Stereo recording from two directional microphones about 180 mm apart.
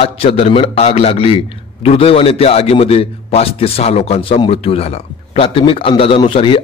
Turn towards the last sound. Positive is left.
turn(degrees=30)  # may be behind; listen again after turning